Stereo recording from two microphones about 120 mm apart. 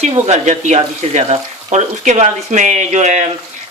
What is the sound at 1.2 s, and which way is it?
Speech, 65° right (ahead or behind).